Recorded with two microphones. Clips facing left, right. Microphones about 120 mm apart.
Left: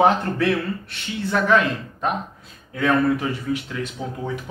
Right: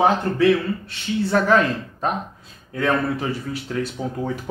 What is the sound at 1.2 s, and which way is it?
Speech, 40° right (ahead or behind).